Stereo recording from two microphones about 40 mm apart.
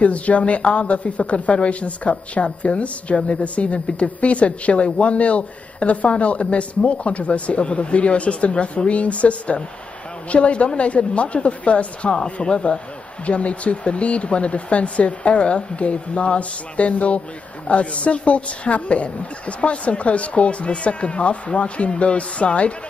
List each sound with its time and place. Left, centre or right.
0.0 s speech: left